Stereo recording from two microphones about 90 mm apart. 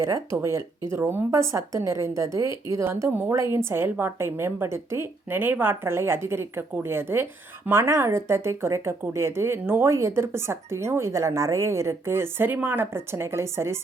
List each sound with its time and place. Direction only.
0.0 s a woman's voice: 35° right (ahead or behind)